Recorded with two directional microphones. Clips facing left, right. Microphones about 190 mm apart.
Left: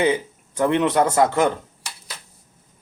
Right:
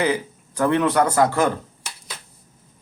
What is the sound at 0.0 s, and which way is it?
Speech, 20° left (ahead or behind).